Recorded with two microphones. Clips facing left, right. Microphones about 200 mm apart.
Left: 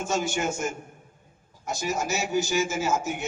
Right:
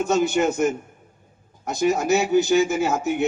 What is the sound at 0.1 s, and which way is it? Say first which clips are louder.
Speech: right 7 dB; 60° right (ahead or behind).